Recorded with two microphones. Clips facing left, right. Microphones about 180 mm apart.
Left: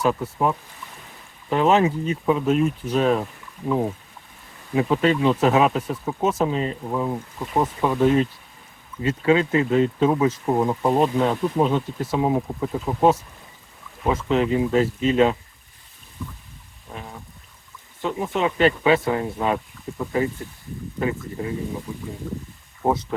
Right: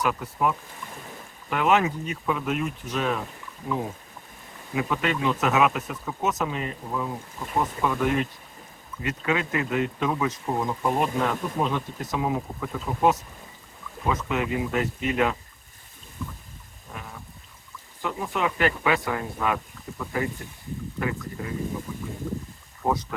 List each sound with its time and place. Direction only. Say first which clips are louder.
0.0 s speech: left 4 dB; 30° left (ahead or behind)
4.7 s speech: left 7 dB; 35° left (ahead or behind)
18.0 s speech: left 4 dB; 25° left (ahead or behind)
22.8 s speech: left 4 dB; 25° left (ahead or behind)